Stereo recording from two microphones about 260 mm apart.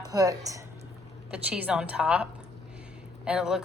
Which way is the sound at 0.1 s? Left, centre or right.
Centre.